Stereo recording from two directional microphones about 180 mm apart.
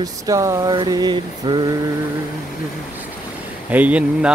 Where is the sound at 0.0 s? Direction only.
20° right (ahead or behind).